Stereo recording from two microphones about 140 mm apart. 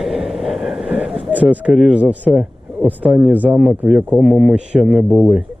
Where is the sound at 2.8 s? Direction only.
10° right (ahead or behind).